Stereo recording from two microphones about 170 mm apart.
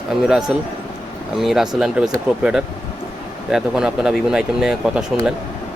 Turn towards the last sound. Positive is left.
turn(degrees=-5)  # may be behind; listen again after turning